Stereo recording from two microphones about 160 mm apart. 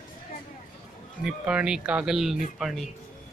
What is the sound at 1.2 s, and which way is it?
Speech, 5° right (ahead or behind).